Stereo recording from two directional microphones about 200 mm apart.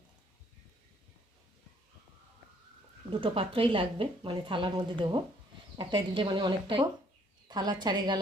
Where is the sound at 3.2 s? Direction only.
25° right (ahead or behind).